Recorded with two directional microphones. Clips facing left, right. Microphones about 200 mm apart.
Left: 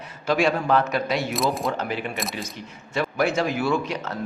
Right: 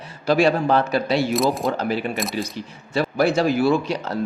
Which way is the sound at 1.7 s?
35° right (ahead or behind).